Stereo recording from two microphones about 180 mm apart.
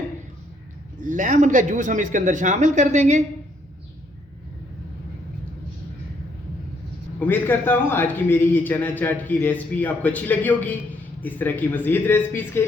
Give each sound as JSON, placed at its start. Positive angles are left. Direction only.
{"t": 1.0, "sound": "speech", "side_deg": -45}
{"t": 7.2, "sound": "a man's voice", "side_deg": 10}